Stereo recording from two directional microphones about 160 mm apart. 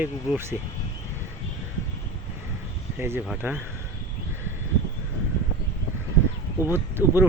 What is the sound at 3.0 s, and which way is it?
Speech, 15° right (ahead or behind).